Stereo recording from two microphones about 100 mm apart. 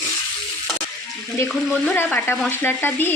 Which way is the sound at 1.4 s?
15° left (ahead or behind).